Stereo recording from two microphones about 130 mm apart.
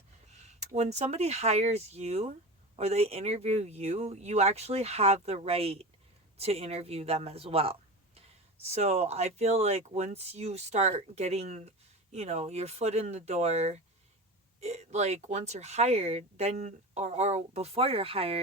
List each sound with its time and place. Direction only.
0.3 s speech: 60° right (ahead or behind)